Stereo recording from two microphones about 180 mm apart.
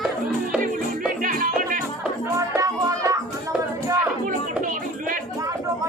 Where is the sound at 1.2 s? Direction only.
50° right (ahead or behind).